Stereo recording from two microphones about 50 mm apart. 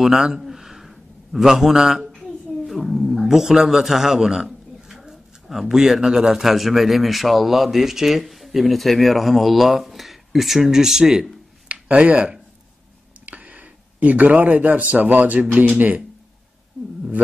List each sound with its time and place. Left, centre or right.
0.0 s a man's voice: centre
11.7 s speech: right